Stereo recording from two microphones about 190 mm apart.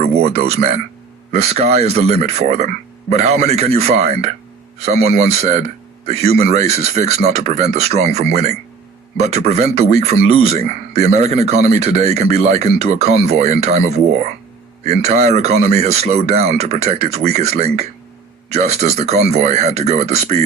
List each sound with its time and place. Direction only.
0.3 s a man's voice: 35° right (ahead or behind)